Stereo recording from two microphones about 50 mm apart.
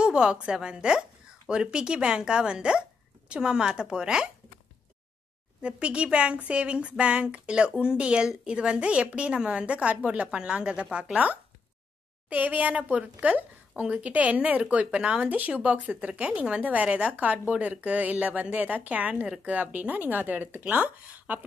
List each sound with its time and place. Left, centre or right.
0.0 s speech: centre
5.6 s speech: right
15.2 s speech: right